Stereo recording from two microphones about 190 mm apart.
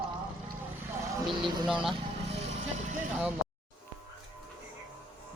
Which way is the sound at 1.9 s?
35° right (ahead or behind).